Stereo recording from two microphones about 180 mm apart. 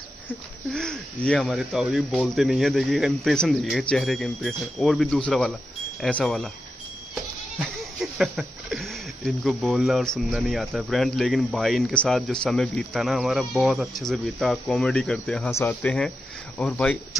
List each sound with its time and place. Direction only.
0.3 s speech: 5° left (ahead or behind)
7.5 s speech: centre (ahead or behind)
15.5 s speech: 15° left (ahead or behind)